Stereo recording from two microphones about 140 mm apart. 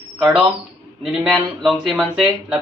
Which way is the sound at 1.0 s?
5° right (ahead or behind).